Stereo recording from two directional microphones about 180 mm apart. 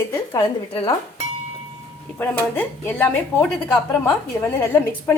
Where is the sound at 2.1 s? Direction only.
10° left (ahead or behind).